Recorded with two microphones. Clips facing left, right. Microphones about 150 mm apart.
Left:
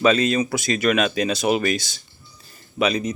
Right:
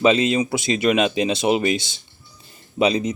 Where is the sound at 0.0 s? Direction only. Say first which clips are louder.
Right 1 dB; 20° right (ahead or behind).